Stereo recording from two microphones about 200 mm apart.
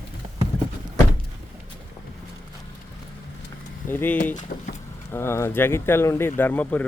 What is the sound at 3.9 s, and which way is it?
Speech, 10° left (ahead or behind).